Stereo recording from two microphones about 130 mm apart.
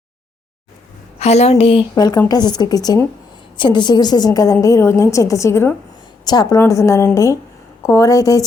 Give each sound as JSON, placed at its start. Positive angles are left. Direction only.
{"t": 1.2, "sound": "a woman's voice", "side_deg": 55}
{"t": 2.0, "sound": "a woman's voice", "side_deg": 30}
{"t": 6.2, "sound": "a woman's voice", "side_deg": 30}